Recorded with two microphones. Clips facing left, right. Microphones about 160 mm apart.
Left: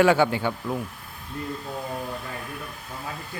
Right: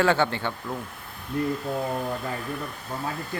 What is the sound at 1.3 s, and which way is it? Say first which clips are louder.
Speech: right 8 dB; 75° right (ahead or behind).